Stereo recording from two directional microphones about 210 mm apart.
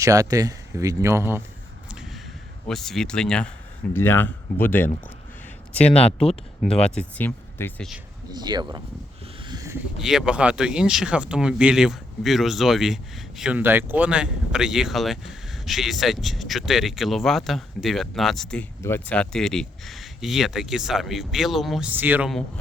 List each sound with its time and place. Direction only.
0.0 s speech: 15° right (ahead or behind)
1.9 s a sound: 5° right (ahead or behind)
2.6 s speech: centre (ahead or behind)
8.3 s speech: 20° right (ahead or behind)
9.4 s a sound: 20° right (ahead or behind)
10.0 s speech: centre (ahead or behind)